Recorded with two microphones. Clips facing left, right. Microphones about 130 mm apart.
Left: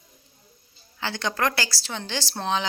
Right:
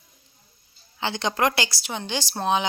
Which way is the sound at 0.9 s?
20° right (ahead or behind).